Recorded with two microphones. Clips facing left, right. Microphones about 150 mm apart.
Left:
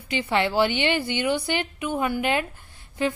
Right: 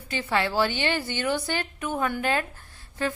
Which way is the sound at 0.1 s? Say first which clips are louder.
Left 3 dB; 15° left (ahead or behind).